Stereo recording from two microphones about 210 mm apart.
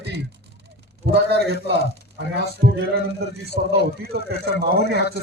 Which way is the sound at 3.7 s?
50° right (ahead or behind).